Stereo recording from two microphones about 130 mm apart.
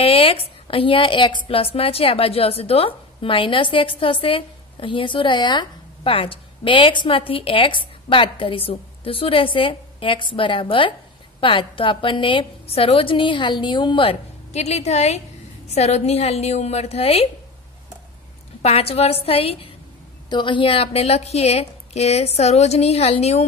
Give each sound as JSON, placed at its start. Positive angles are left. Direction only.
{"t": 0.0, "sound": "a woman's voice", "side_deg": 45}
{"t": 14.5, "sound": "a woman's voice", "side_deg": 60}
{"t": 18.6, "sound": "a woman's voice", "side_deg": 50}
{"t": 20.2, "sound": "a woman's voice", "side_deg": 35}